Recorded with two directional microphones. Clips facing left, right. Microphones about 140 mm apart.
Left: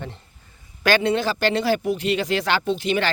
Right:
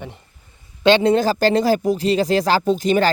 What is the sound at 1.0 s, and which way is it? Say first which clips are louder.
Speech: right 5 dB; 40° right (ahead or behind).